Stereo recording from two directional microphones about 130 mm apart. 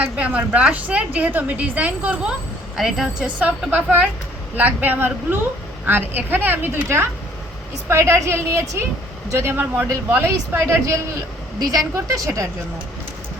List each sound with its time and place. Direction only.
0.0 s a woman's voice: 10° right (ahead or behind)